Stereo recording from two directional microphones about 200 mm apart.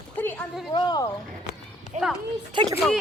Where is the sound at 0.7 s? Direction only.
20° left (ahead or behind).